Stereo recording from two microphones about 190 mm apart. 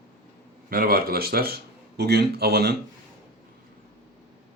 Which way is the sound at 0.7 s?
50° right (ahead or behind).